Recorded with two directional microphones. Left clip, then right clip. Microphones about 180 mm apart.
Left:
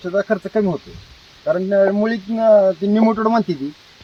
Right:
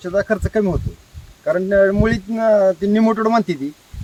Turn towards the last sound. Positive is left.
turn(degrees=-5)  # may be behind; listen again after turning